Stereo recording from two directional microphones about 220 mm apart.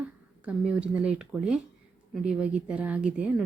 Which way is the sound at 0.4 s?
5° right (ahead or behind).